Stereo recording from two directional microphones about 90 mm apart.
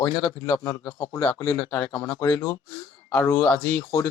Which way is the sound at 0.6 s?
35° left (ahead or behind).